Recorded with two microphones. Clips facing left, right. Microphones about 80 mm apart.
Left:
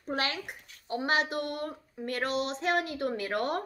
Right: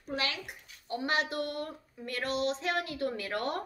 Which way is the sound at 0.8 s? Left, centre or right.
Left.